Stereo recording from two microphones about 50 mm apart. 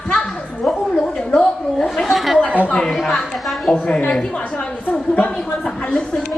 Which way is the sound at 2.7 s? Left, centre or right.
Centre.